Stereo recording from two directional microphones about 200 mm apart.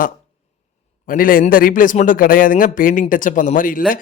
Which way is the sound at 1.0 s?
45° left (ahead or behind).